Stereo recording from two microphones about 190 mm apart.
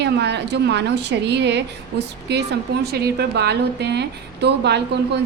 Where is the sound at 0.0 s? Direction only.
60° right (ahead or behind).